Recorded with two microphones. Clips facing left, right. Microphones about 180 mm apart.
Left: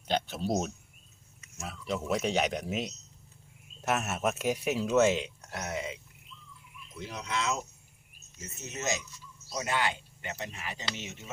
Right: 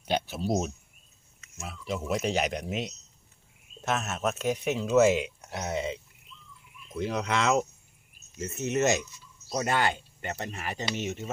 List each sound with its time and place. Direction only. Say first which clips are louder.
0.1 s speech: right 2 dB; 5° right (ahead or behind)
5.0 s speech: right 3 dB; 10° right (ahead or behind); by 6.0 s 25° right (ahead or behind)
6.9 s speech: right 7 dB; 60° right (ahead or behind)
9.5 s speech: right 4 dB; 50° right (ahead or behind)